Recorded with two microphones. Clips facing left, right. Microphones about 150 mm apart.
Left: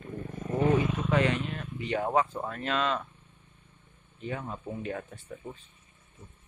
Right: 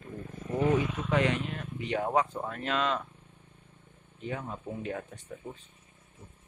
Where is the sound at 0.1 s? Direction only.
45° left (ahead or behind).